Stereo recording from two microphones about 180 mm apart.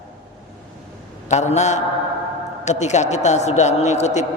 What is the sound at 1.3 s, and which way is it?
A woman's voice, 40° left (ahead or behind).